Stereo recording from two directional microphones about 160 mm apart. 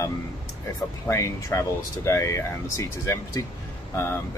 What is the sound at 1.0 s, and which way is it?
Speech, 20° left (ahead or behind).